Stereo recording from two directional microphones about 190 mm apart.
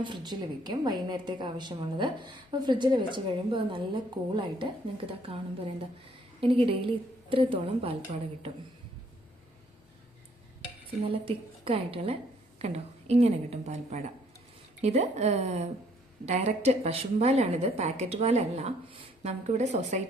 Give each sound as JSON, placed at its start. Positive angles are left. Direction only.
{"t": 0.0, "sound": "a woman's voice", "side_deg": -25}
{"t": 6.4, "sound": "a woman's voice", "side_deg": -30}
{"t": 11.1, "sound": "a woman's voice", "side_deg": -30}